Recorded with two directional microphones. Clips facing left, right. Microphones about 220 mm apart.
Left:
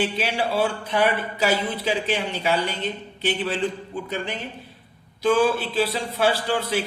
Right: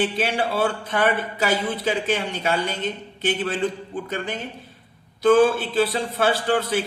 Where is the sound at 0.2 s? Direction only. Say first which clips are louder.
Right 1 dB; 50° right (ahead or behind).